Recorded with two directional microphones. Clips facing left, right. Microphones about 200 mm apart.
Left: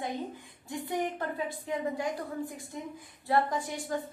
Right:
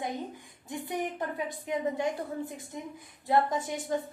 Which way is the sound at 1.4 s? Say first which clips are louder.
Right 1 dB; 20° right (ahead or behind).